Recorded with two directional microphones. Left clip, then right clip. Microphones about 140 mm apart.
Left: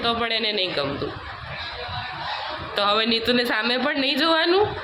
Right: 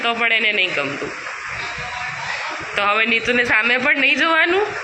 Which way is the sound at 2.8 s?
25° left (ahead or behind).